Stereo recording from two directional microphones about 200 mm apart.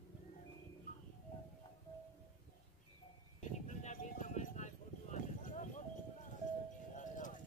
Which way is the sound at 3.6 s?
35° left (ahead or behind).